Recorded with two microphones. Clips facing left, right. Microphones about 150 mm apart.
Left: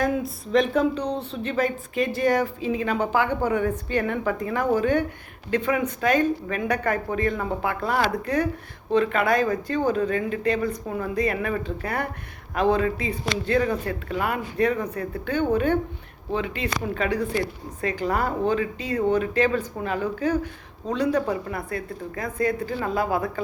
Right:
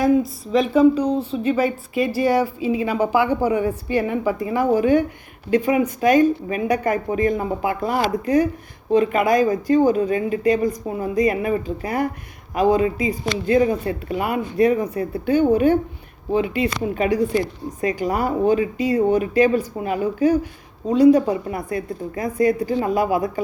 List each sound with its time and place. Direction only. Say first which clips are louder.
0.0 s speech: right 7 dB; centre (ahead or behind)